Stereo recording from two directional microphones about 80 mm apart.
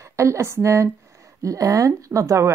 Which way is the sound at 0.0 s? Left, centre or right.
Right.